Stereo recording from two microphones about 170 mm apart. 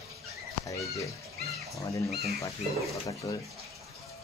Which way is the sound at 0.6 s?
20° left (ahead or behind).